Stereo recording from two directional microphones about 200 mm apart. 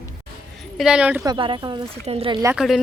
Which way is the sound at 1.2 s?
25° right (ahead or behind).